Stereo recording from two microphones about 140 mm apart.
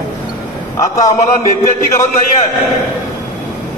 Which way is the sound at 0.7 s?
20° left (ahead or behind).